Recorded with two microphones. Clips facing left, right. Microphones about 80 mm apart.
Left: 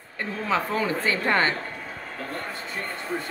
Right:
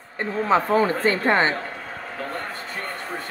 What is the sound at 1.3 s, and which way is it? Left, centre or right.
Speech, right.